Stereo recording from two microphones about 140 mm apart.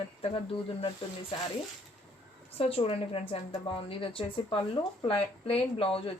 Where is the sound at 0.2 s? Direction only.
40° left (ahead or behind).